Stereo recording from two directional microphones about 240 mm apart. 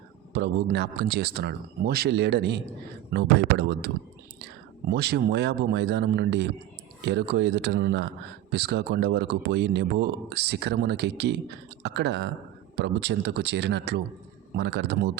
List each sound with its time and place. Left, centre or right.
0.3 s speech: right